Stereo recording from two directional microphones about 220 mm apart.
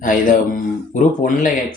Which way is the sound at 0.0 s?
35° left (ahead or behind).